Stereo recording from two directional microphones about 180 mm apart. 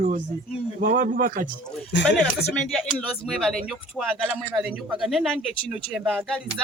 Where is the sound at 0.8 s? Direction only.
45° right (ahead or behind).